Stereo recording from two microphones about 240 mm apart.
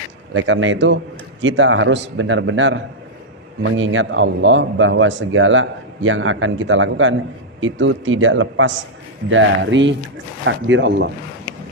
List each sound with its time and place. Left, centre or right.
0.3 s speech: right